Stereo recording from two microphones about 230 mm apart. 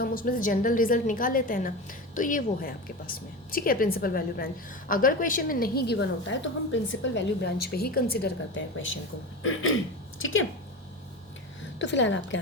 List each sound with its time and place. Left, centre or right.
0.0 s a woman's voice: left
11.8 s a woman's voice: left